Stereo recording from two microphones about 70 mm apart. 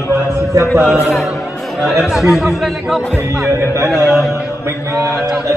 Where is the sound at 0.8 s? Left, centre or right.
Centre.